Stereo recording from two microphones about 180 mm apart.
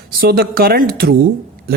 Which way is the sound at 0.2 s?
55° right (ahead or behind).